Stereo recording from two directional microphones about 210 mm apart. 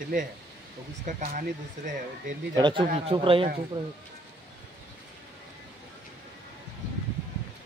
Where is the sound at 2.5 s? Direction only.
20° right (ahead or behind).